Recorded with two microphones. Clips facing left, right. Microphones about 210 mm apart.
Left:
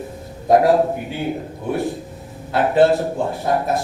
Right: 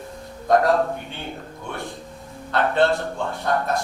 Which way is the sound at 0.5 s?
5° left (ahead or behind).